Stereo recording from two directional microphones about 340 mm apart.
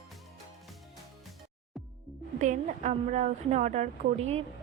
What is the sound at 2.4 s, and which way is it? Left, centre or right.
A woman's voice, right.